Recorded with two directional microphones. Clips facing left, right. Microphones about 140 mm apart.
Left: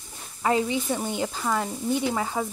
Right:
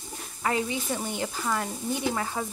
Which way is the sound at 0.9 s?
15° left (ahead or behind).